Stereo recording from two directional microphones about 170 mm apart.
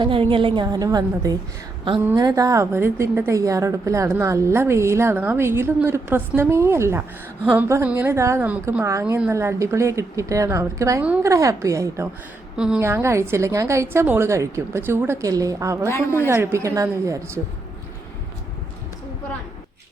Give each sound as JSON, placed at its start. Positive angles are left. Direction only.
{"t": 0.0, "sound": "a woman's voice", "side_deg": -30}
{"t": 12.5, "sound": "a woman's voice", "side_deg": -5}
{"t": 12.8, "sound": "a woman's voice", "side_deg": -15}
{"t": 15.9, "sound": "a woman's voice", "side_deg": 15}
{"t": 16.2, "sound": "a woman's voice", "side_deg": -15}